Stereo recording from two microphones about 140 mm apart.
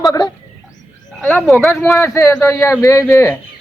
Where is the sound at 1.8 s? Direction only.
15° left (ahead or behind).